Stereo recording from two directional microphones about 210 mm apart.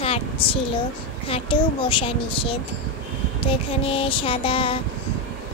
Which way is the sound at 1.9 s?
25° left (ahead or behind).